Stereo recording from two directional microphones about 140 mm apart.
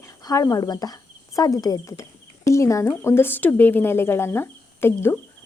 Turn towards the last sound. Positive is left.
turn(degrees=15)  # may be behind; listen again after turning